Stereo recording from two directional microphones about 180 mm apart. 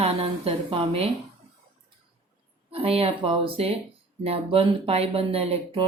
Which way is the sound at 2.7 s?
35° right (ahead or behind).